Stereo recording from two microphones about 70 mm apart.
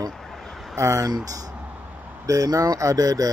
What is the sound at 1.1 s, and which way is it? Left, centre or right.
Speech, right.